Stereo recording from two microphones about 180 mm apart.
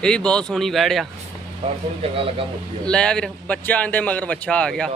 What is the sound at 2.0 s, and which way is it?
Speech, 30° right (ahead or behind).